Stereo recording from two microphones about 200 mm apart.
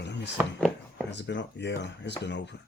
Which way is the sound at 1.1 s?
60° left (ahead or behind).